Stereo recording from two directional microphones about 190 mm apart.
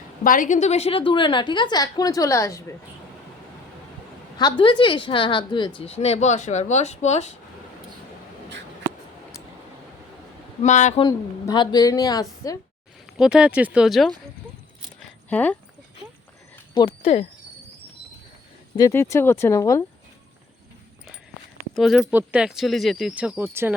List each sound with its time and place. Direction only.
0.3 s a woman's voice: 45° left (ahead or behind); by 2.6 s 15° left (ahead or behind)
4.4 s a woman's voice: 25° left (ahead or behind)
10.6 s speech: 40° left (ahead or behind)
11.0 s a woman's voice: 25° left (ahead or behind)
13.1 s speech: 5° right (ahead or behind)
15.3 s speech: 10° left (ahead or behind)
16.7 s a sound: 25° left (ahead or behind)
18.8 s speech: 15° left (ahead or behind)
21.8 s speech: centre (ahead or behind)